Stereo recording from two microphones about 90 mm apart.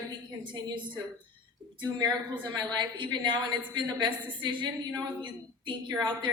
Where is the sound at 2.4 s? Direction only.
55° right (ahead or behind).